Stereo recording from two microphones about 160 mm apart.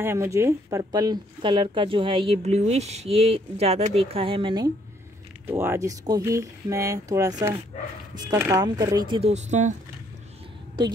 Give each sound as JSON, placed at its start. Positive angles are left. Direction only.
{"t": 0.0, "sound": "speech", "side_deg": -15}
{"t": 5.5, "sound": "speech", "side_deg": -15}
{"t": 9.3, "sound": "speech", "side_deg": -45}